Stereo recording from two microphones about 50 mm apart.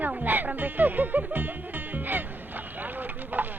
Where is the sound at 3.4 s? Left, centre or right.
Right.